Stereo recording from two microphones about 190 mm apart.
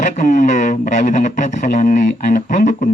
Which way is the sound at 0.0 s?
45° left (ahead or behind).